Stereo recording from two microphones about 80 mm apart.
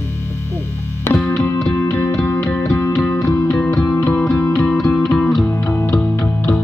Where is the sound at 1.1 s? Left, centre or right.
Centre.